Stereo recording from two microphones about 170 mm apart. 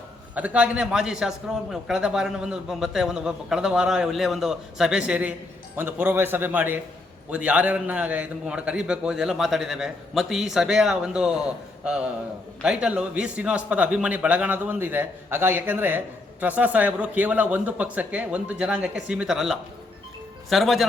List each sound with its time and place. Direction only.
0.3 s a man's voice: 10° right (ahead or behind)